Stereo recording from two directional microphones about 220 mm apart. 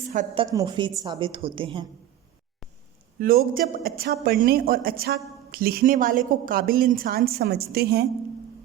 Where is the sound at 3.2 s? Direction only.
40° right (ahead or behind).